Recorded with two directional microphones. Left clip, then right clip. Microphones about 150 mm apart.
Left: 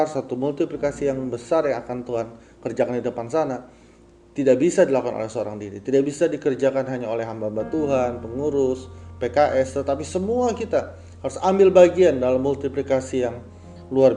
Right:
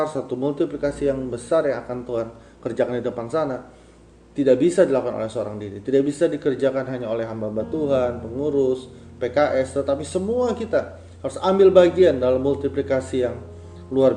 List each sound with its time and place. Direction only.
0.0 s speech: 30° left (ahead or behind)